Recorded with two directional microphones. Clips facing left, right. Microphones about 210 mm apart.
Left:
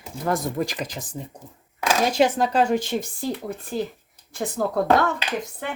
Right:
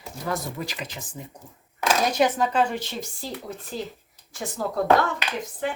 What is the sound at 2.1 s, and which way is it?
Speech, 30° left (ahead or behind).